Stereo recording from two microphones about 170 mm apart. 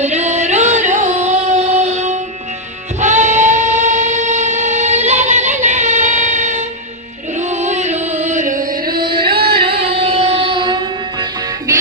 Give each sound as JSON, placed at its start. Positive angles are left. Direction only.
{"t": 0.0, "sound": "singing", "side_deg": -40}
{"t": 7.3, "sound": "music", "side_deg": -45}
{"t": 9.0, "sound": "music", "side_deg": -30}
{"t": 9.3, "sound": "music", "side_deg": -65}
{"t": 10.0, "sound": "music", "side_deg": -35}